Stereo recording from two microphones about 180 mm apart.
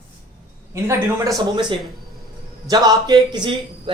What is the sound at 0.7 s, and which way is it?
Speech, 15° right (ahead or behind).